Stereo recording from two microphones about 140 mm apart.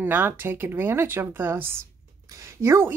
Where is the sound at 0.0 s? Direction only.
15° right (ahead or behind).